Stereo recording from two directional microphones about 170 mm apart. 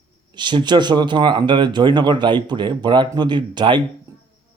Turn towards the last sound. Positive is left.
turn(degrees=-25)  # may be behind; listen again after turning